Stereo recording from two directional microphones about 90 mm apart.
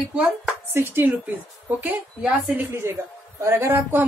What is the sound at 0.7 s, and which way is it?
Speech, 25° right (ahead or behind).